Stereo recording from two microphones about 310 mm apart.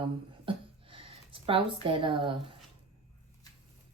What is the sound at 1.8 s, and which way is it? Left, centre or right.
Speech, centre.